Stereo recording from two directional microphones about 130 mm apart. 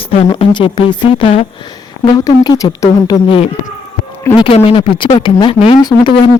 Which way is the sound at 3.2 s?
45° left (ahead or behind).